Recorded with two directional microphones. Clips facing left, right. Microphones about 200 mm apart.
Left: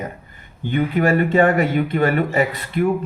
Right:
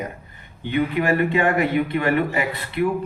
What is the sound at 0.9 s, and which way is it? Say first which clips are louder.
A man's voice: left 6 dB; 45° left (ahead or behind).